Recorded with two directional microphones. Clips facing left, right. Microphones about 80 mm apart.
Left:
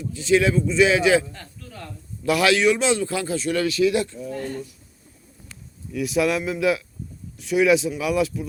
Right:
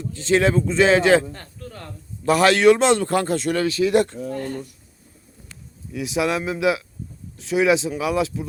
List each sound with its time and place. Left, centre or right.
0.3 s a man's voice: right
2.6 s speech: right
3.5 s speech: right
3.9 s a man's voice: right
5.9 s speech: right